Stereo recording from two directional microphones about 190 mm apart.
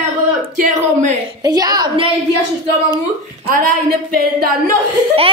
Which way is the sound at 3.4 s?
50° right (ahead or behind).